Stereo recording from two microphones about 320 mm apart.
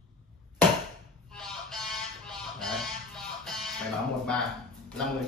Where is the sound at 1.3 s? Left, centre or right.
Centre.